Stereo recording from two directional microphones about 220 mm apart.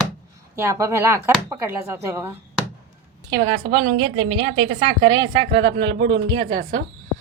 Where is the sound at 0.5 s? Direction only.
15° right (ahead or behind).